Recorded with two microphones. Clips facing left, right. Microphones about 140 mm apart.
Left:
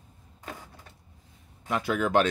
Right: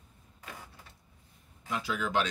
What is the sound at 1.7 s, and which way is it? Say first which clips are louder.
Speech: left 7 dB; 55° left (ahead or behind).